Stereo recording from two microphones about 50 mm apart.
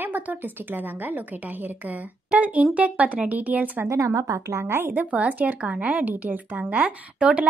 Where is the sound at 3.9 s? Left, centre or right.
Right.